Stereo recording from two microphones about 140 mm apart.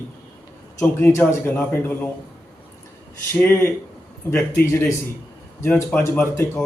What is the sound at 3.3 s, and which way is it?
A man's voice, 15° left (ahead or behind).